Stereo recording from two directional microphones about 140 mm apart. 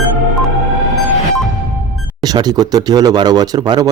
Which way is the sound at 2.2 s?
30° right (ahead or behind).